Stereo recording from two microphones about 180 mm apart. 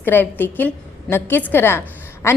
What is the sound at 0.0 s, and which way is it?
A woman's voice, 10° left (ahead or behind).